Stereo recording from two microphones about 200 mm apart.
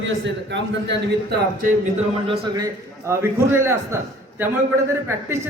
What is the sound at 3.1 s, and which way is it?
A woman's voice, 15° right (ahead or behind).